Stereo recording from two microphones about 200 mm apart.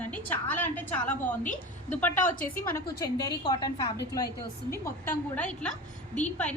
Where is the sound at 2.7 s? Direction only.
20° left (ahead or behind).